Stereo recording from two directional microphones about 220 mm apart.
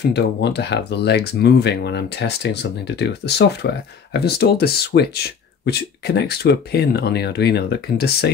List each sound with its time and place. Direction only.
0.1 s speech: 50° left (ahead or behind)